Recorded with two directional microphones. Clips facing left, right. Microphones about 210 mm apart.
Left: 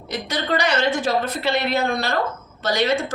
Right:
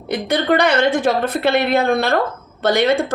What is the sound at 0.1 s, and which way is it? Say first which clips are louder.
Speech: right 7 dB; 55° right (ahead or behind).